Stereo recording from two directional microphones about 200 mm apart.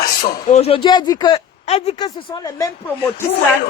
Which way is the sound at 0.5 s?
30° left (ahead or behind).